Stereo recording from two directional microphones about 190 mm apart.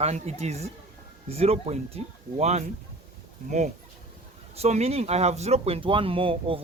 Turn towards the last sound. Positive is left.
turn(degrees=-30)  # may be behind; listen again after turning